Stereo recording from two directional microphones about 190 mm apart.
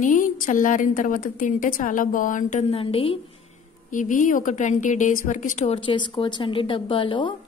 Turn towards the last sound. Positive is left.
turn(degrees=25)  # may be behind; listen again after turning